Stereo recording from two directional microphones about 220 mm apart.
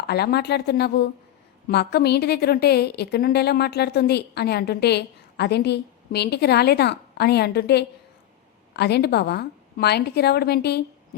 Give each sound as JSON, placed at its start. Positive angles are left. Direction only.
{"t": 0.1, "sound": "a woman's voice", "side_deg": 45}